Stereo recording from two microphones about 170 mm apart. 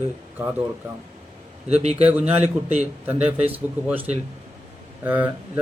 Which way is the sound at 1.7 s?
40° right (ahead or behind).